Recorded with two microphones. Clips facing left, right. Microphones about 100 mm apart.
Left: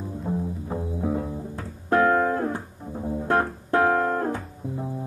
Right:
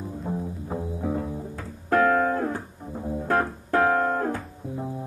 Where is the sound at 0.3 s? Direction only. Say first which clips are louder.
Left 3 dB; centre (ahead or behind).